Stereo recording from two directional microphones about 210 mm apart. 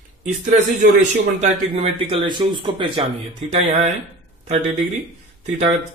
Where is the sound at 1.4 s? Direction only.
30° right (ahead or behind).